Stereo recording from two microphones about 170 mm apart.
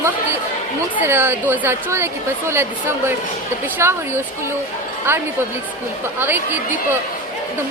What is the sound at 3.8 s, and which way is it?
Speech, 15° right (ahead or behind).